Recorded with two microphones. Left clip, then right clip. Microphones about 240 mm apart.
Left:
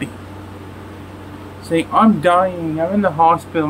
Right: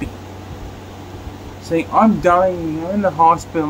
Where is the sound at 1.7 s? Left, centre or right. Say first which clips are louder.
Even; centre.